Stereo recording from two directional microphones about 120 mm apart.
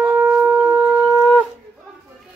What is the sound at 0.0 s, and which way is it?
Shofar, 15° right (ahead or behind).